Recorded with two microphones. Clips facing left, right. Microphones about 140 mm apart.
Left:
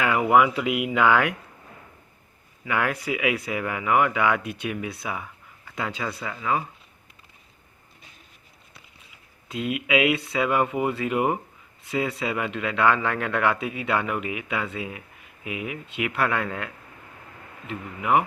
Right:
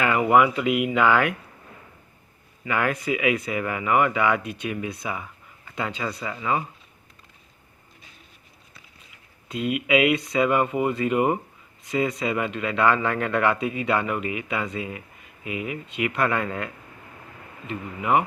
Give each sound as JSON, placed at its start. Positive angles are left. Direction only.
{"t": 0.0, "sound": "speech", "side_deg": 5}
{"t": 2.6, "sound": "speech", "side_deg": 5}
{"t": 9.5, "sound": "speech", "side_deg": 5}